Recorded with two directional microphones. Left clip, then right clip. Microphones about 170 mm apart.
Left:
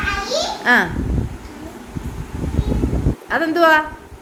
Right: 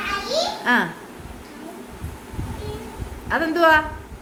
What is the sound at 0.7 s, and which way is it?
Speech, 20° left (ahead or behind).